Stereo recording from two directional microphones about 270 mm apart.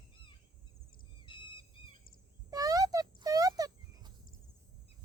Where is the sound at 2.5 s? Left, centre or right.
Centre.